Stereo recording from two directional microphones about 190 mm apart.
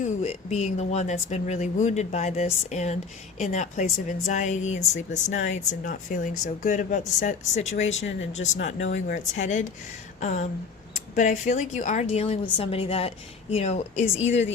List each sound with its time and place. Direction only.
0.0 s speech: 35° left (ahead or behind)